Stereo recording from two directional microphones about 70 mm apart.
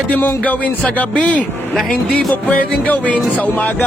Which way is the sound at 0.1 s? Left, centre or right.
Left.